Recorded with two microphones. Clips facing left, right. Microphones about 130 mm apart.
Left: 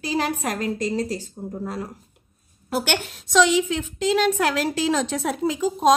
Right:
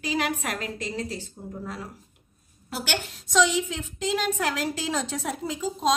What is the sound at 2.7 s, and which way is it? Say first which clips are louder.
A woman's voice: left 6 dB; 60° left (ahead or behind).